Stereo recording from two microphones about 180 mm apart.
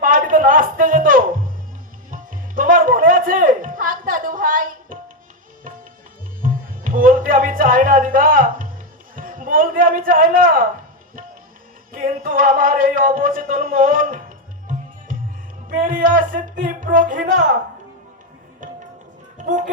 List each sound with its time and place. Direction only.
0.0 s a sound: 50° right (ahead or behind)
2.0 s music: 50° right (ahead or behind)
6.4 s music: 50° right (ahead or behind)
11.9 s a sound: 50° right (ahead or behind)
15.7 s music: 50° right (ahead or behind)
18.6 s music: 45° right (ahead or behind)